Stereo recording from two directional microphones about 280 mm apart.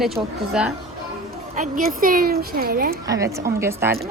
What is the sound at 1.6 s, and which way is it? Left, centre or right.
Speech, right.